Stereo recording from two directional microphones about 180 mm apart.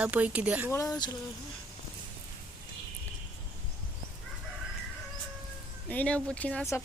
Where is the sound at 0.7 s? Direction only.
15° left (ahead or behind).